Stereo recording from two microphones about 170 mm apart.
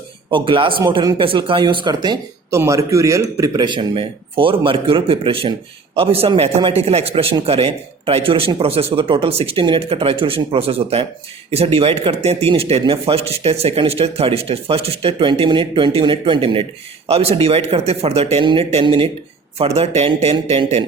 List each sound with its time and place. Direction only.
0.3 s speech: 30° right (ahead or behind)